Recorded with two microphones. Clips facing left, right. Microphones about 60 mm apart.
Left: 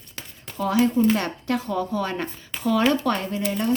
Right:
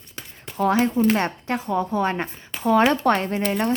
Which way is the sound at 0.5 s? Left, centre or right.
Right.